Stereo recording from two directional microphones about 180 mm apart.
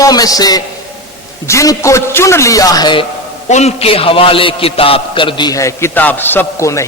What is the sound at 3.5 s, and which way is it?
A man's voice, 35° left (ahead or behind).